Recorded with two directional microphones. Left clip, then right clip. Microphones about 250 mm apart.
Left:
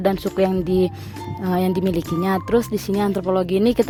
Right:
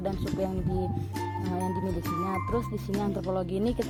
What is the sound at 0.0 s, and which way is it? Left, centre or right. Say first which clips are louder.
Speech: left 12 dB; left.